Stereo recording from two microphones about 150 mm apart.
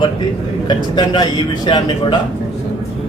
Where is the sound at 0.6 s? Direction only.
30° left (ahead or behind).